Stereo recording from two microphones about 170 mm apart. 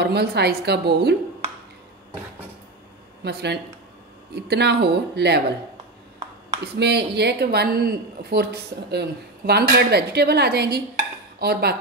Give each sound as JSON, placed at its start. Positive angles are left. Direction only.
{"t": 0.0, "sound": "speech", "side_deg": -75}
{"t": 3.3, "sound": "speech", "side_deg": -75}
{"t": 6.8, "sound": "speech", "side_deg": -75}